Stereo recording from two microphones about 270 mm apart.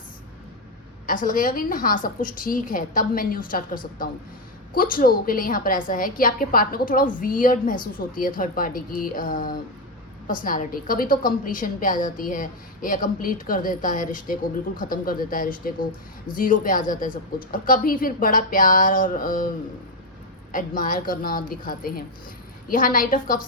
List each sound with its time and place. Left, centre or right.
1.0 s a woman's voice: left
20.5 s a woman's voice: left